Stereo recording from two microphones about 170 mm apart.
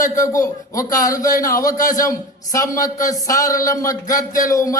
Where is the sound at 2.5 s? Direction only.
20° left (ahead or behind).